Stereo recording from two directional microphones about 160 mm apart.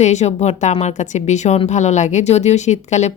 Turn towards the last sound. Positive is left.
turn(degrees=45)  # may be behind; listen again after turning